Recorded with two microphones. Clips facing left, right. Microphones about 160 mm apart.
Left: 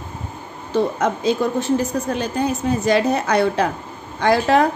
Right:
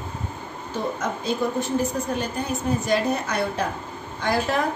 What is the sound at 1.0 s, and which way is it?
A woman's voice, 90° left.